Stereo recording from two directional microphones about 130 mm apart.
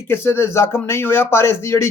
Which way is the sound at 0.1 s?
20° left (ahead or behind).